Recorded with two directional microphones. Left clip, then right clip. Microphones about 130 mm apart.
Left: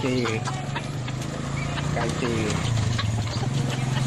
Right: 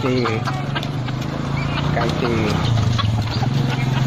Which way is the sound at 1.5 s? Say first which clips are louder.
Right 7 dB; 15° left (ahead or behind).